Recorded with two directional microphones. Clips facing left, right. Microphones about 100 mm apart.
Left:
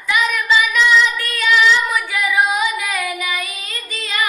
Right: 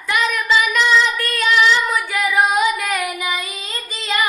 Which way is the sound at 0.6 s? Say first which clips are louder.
Left 1 dB; 45° right (ahead or behind).